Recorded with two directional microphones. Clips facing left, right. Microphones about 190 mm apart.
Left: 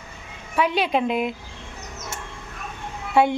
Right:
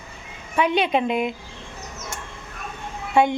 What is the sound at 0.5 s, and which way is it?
Speech, centre (ahead or behind).